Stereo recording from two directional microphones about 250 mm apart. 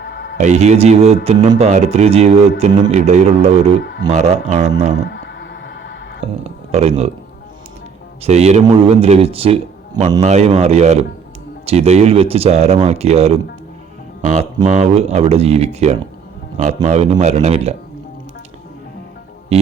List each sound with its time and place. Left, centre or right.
0.0 s music: left
0.3 s a man's voice: right
3.8 s speech: left
4.1 s a man's voice: right
4.9 s music: left
6.4 s speech: right
8.2 s a man's voice: right